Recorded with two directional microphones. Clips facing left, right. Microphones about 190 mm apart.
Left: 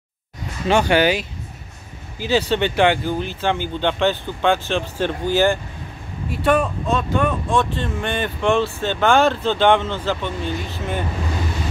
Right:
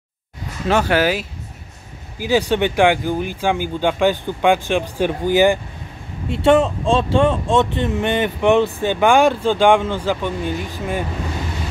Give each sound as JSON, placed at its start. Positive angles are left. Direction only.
{"t": 0.7, "sound": "speech", "side_deg": -5}
{"t": 6.2, "sound": "speech", "side_deg": -25}